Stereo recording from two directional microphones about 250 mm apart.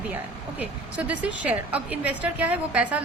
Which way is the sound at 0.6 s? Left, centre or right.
Centre.